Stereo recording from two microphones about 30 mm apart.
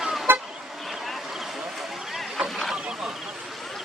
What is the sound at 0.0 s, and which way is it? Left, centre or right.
Vehicle, centre.